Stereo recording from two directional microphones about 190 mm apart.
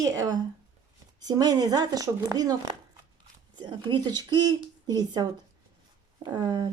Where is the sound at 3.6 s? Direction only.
25° right (ahead or behind).